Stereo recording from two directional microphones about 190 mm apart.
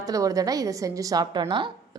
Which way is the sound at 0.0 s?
20° right (ahead or behind).